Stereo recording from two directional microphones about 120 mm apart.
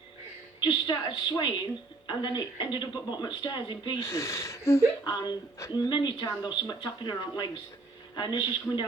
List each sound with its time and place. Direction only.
0.6 s speech: 40° left (ahead or behind)
4.0 s speech: 20° left (ahead or behind)
5.0 s speech: 35° left (ahead or behind)